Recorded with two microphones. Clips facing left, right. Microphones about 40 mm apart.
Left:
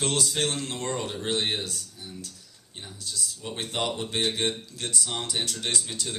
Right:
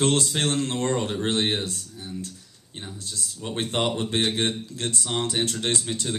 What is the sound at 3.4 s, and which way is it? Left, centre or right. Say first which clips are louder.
Speech: right 5 dB; right.